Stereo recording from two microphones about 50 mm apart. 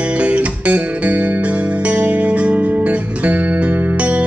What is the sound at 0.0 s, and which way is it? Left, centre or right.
Music, right.